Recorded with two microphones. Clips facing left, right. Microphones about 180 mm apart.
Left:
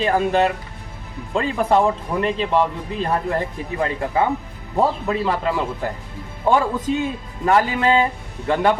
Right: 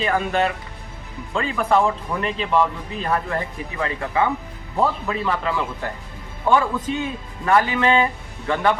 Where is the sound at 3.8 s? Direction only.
40° left (ahead or behind).